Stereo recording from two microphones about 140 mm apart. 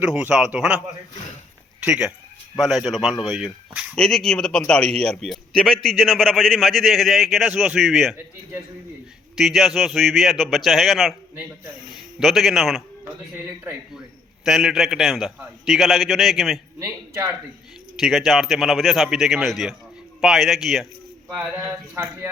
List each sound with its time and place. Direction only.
0.0 s speech: 5° right (ahead or behind)
1.8 s speech: 5° right (ahead or behind)
9.3 s speech: centre (ahead or behind)
12.2 s speech: centre (ahead or behind)
14.4 s speech: centre (ahead or behind)
16.8 s speech: 25° right (ahead or behind)
18.0 s speech: centre (ahead or behind)
21.9 s speech: 20° right (ahead or behind)